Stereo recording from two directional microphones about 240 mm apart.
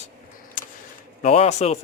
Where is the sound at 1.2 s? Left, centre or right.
Left.